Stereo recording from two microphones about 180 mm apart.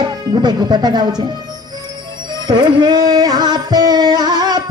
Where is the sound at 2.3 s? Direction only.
25° right (ahead or behind).